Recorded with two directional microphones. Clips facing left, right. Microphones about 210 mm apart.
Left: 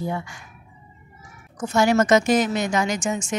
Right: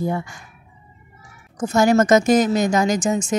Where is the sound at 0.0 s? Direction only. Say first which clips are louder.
Right 4 dB; 45° right (ahead or behind).